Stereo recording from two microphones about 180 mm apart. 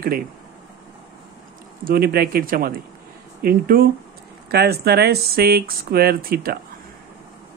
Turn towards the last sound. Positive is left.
turn(degrees=-55)  # may be behind; listen again after turning